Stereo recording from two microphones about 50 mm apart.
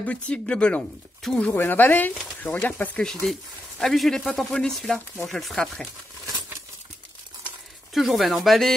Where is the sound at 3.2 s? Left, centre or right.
Centre.